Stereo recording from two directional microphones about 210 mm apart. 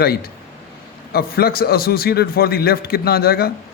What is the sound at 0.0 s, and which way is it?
A man's voice, 45° left (ahead or behind).